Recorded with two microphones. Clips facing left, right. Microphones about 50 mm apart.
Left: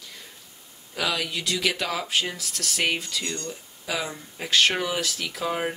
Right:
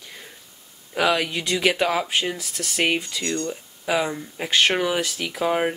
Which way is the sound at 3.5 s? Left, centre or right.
Right.